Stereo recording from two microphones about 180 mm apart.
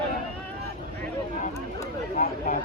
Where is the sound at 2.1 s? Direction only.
40° left (ahead or behind).